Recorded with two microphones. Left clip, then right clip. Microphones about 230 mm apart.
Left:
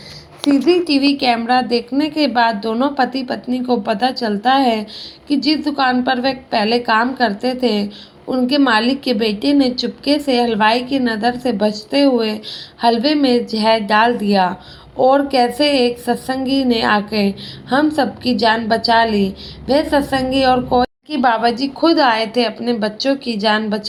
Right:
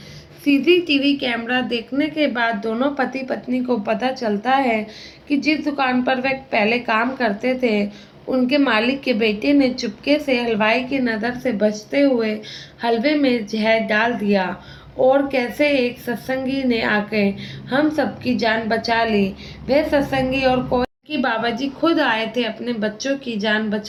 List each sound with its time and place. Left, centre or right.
0.5 s a woman's voice: centre